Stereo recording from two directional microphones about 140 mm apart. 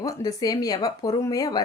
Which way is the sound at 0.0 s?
25° left (ahead or behind).